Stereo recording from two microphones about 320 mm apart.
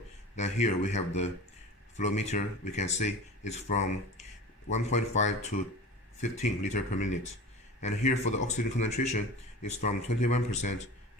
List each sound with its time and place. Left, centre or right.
0.3 s speech: left